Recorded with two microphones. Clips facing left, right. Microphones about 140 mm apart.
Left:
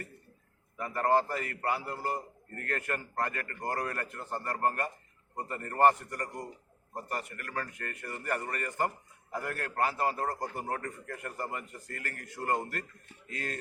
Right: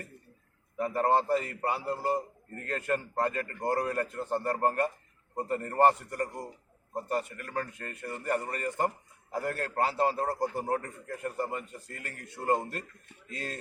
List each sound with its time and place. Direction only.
0.8 s a man's voice: 25° right (ahead or behind)
6.2 s a man's voice: 5° right (ahead or behind)
6.9 s a man's voice: 25° right (ahead or behind)